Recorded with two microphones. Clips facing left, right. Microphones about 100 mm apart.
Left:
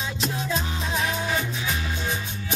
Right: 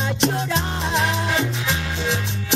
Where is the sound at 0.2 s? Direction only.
70° right (ahead or behind).